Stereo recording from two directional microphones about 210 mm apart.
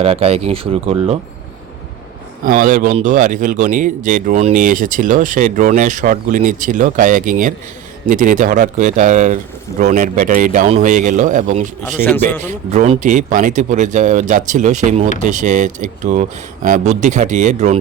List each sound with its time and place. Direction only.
0.0 s speech: 30° right (ahead or behind)
2.4 s speech: 40° right (ahead or behind)
11.9 s a man's voice: 10° left (ahead or behind)
12.5 s speech: 35° right (ahead or behind)